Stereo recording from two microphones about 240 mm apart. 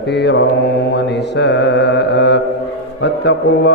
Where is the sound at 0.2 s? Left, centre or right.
Left.